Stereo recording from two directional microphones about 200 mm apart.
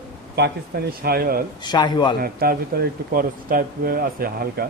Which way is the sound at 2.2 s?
50° right (ahead or behind).